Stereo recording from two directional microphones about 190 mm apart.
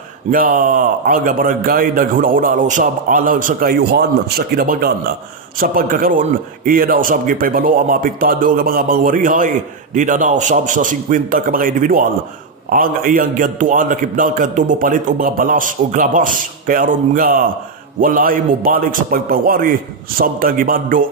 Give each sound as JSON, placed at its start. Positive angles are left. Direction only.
{"t": 0.3, "sound": "a man's voice", "side_deg": -50}